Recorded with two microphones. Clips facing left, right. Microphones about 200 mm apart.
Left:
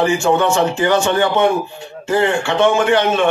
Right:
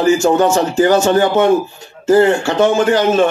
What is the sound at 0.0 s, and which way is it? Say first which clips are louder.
A man's voice: right 3 dB; 40° right (ahead or behind).